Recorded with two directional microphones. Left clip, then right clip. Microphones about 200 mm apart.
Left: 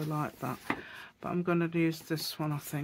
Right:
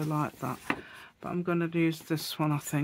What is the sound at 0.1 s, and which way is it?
Speech, 20° right (ahead or behind).